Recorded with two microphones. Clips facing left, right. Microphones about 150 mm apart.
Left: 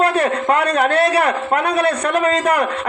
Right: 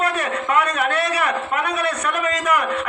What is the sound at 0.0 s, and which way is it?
A man's voice, 35° left (ahead or behind).